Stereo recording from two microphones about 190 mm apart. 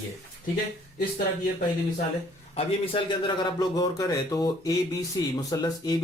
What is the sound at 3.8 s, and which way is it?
Speech, 20° left (ahead or behind).